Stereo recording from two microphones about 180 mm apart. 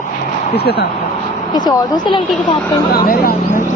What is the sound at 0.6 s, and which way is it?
Speech, 60° left (ahead or behind).